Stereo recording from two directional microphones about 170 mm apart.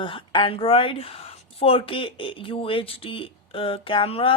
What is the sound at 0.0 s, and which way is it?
Speech, 30° left (ahead or behind).